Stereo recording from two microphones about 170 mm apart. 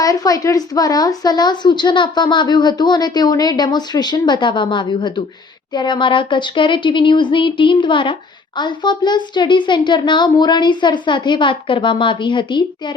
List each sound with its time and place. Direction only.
0.0 s a woman's voice: 20° left (ahead or behind)